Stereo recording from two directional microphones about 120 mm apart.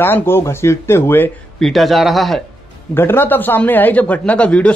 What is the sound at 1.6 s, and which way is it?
Speech, centre (ahead or behind).